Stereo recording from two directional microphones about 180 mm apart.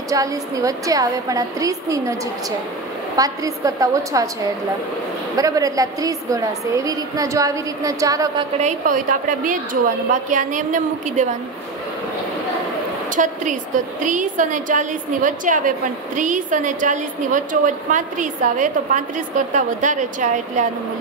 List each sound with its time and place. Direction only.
0.1 s a woman's voice: 20° right (ahead or behind)
3.2 s a woman's voice: 20° right (ahead or behind)
5.3 s a woman's voice: 20° right (ahead or behind)
8.5 s a woman's voice: 45° right (ahead or behind)
13.1 s a woman's voice: 45° right (ahead or behind)